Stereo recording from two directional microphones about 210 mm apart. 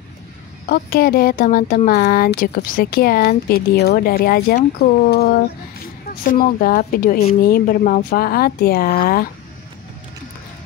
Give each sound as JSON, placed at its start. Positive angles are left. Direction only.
{"t": 0.7, "sound": "speech", "side_deg": 45}